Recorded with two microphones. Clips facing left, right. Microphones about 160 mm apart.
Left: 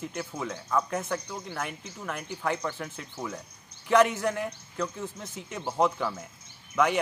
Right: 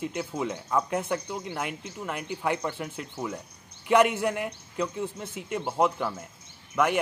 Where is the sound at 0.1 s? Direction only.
15° right (ahead or behind).